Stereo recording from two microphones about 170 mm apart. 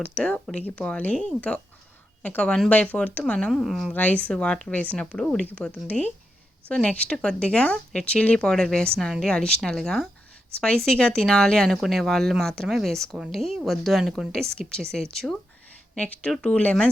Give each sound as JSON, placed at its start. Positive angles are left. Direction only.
{"t": 0.0, "sound": "speech", "side_deg": 5}